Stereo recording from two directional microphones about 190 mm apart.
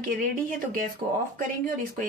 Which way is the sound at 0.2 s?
45° right (ahead or behind).